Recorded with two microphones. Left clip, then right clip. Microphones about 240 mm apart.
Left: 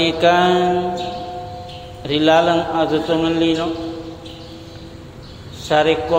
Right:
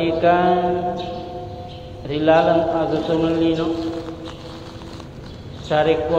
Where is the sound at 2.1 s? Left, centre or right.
Left.